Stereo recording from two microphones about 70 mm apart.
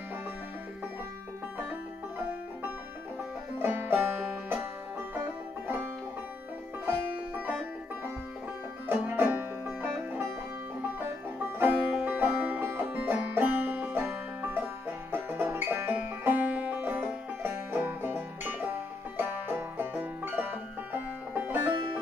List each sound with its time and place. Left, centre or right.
3.5 s music: right
7.3 s banjo: right
8.8 s music: right
15.9 s music: right